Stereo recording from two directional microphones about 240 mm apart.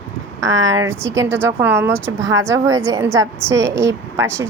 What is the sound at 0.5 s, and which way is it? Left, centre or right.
Speech, right.